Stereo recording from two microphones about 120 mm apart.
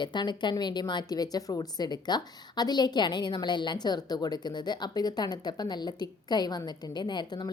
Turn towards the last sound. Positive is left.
turn(degrees=35)  # may be behind; listen again after turning